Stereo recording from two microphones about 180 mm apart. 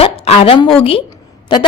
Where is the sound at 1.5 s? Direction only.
25° left (ahead or behind).